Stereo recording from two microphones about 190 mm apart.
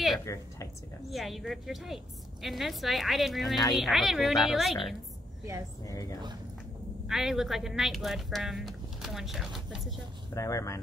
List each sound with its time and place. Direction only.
0.2 s speech: 15° left (ahead or behind)
1.1 s speech: centre (ahead or behind)
5.9 s speech: 15° left (ahead or behind)
7.1 s speech: centre (ahead or behind)
10.3 s speech: 15° left (ahead or behind)